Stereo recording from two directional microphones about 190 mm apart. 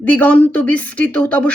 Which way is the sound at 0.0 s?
10° left (ahead or behind).